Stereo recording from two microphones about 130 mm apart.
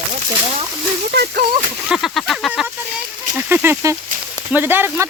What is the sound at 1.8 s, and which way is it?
Speech, centre (ahead or behind).